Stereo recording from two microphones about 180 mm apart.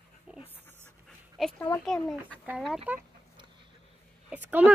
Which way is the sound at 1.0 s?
Centre (ahead or behind).